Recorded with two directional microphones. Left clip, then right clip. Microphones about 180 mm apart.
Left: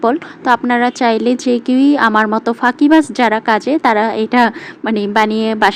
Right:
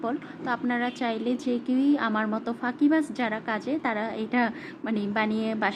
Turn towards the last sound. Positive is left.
turn(degrees=40)  # may be behind; listen again after turning